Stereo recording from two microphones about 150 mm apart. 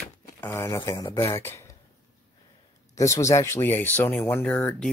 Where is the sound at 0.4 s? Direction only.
15° left (ahead or behind).